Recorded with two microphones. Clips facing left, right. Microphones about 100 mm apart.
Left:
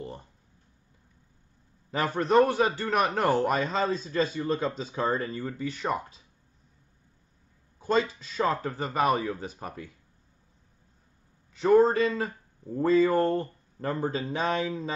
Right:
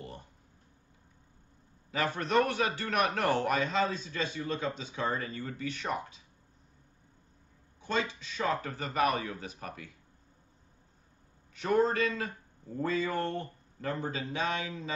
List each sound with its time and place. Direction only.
2.1 s a man's voice: 30° left (ahead or behind)
7.8 s a man's voice: 40° left (ahead or behind)
11.5 s a man's voice: 35° left (ahead or behind)